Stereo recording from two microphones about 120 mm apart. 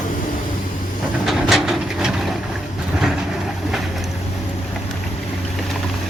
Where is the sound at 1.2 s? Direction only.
Centre (ahead or behind).